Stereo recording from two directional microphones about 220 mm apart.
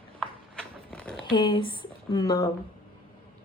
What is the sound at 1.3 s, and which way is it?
Speech, 20° left (ahead or behind).